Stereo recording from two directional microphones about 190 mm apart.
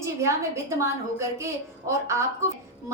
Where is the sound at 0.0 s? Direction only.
15° right (ahead or behind).